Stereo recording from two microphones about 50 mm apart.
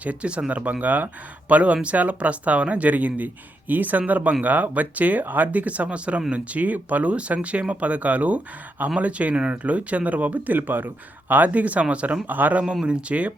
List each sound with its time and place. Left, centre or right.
0.0 s speech: right
12.3 s speech: right
12.8 s speech: right